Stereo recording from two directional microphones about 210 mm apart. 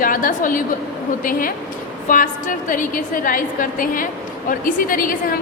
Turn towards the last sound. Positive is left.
turn(degrees=40)  # may be behind; listen again after turning